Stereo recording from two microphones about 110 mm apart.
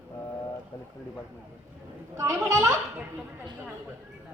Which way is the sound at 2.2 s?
30° right (ahead or behind).